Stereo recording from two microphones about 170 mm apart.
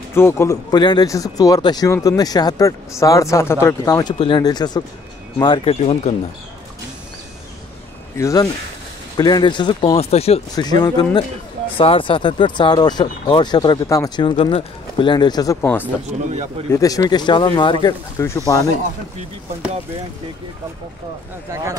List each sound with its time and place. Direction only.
0.1 s speech: 15° left (ahead or behind)
4.1 s speech: 35° left (ahead or behind)
4.4 s speech: 25° left (ahead or behind)
8.2 s speech: 20° left (ahead or behind); by 10.4 s 35° left (ahead or behind)
10.5 s speech: 25° left (ahead or behind)
15.6 s speech: 10° left (ahead or behind)
16.3 s speech: 40° right (ahead or behind)
16.7 s speech: 20° left (ahead or behind)